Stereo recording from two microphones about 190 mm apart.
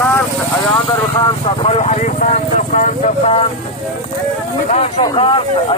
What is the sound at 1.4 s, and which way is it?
Speech, 30° left (ahead or behind).